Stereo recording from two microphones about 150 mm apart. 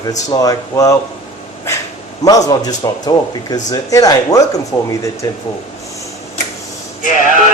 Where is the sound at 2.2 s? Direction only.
25° left (ahead or behind).